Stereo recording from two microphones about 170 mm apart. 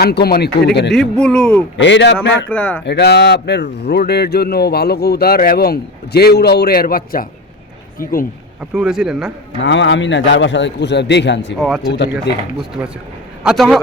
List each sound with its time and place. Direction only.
0.0 s speech: 70° left (ahead or behind)
0.9 s speech: 5° left (ahead or behind)
1.8 s a man's voice: 90° left
2.5 s speech: 5° left (ahead or behind)
2.8 s speech: 80° left; by 8.3 s 55° left (ahead or behind)
8.7 s speech: 5° right (ahead or behind)
9.6 s a man's voice: 90° left
11.6 s speech: centre (ahead or behind)
11.9 s a man's voice: 90° left
13.4 s speech: 5° right (ahead or behind)